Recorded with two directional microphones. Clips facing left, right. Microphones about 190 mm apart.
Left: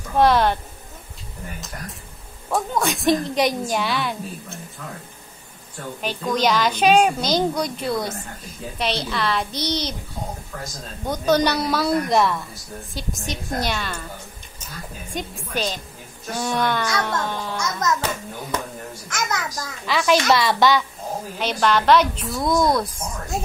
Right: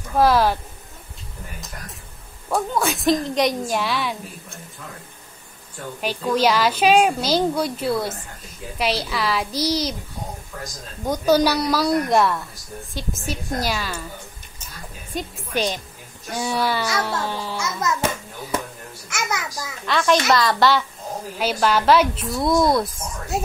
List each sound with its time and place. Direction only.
0.2 s a woman's voice: centre (ahead or behind)
2.5 s a woman's voice: centre (ahead or behind)
5.9 s a woman's voice: 10° right (ahead or behind)
11.1 s a woman's voice: 10° right (ahead or behind)
15.1 s a woman's voice: 10° right (ahead or behind)
19.9 s a woman's voice: 5° left (ahead or behind)